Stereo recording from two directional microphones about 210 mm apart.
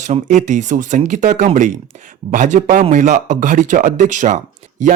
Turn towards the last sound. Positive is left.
turn(degrees=-35)  # may be behind; listen again after turning